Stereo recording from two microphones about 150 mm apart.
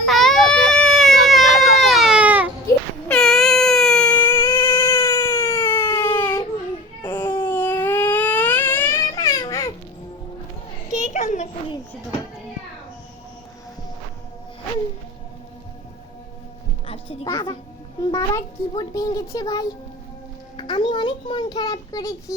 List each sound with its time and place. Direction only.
0.0 s baby cry: centre (ahead or behind)
3.1 s a sound: 5° left (ahead or behind)
5.0 s cat: 20° left (ahead or behind)
6.1 s baby cry: 15° left (ahead or behind)
10.9 s children playing: 55° left (ahead or behind)
16.8 s music: 40° left (ahead or behind)
17.2 s a sound: 25° left (ahead or behind)